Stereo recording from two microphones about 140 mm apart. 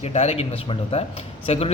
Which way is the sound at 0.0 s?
50° left (ahead or behind).